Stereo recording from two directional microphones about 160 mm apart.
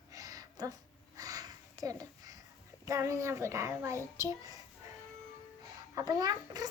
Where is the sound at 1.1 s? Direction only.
20° right (ahead or behind).